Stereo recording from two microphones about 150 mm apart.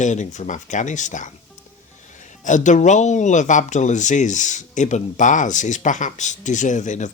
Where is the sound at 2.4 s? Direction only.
55° left (ahead or behind).